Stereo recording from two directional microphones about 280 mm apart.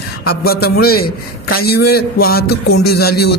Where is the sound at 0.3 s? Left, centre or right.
Left.